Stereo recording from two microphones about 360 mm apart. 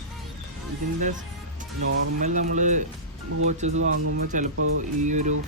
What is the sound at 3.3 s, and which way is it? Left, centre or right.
Speech, right.